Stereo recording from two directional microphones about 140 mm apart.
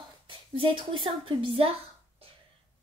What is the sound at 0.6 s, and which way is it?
A woman's voice, 35° right (ahead or behind).